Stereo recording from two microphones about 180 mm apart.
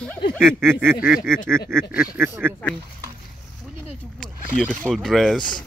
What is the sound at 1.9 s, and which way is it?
Speech, 10° right (ahead or behind).